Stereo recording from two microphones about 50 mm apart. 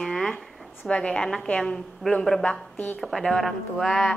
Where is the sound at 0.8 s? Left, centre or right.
Left; by 4.2 s centre.